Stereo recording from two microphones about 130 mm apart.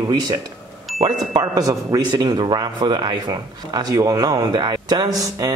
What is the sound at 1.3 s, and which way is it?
Speech, 30° right (ahead or behind).